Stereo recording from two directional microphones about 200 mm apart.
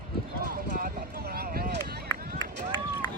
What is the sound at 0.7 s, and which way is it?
Clip-clop, 45° right (ahead or behind).